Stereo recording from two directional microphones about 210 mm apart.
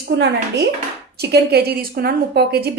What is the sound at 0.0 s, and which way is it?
A woman's voice, 55° right (ahead or behind).